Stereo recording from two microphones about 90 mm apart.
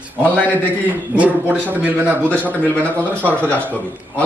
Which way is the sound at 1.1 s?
20° right (ahead or behind).